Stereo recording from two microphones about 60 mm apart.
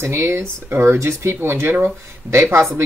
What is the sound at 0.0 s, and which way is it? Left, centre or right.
Speech, right.